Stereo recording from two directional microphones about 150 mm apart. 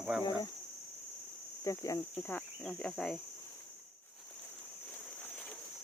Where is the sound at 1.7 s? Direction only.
20° left (ahead or behind).